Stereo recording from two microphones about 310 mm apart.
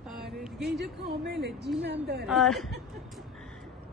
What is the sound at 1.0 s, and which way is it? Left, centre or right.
Speech, right.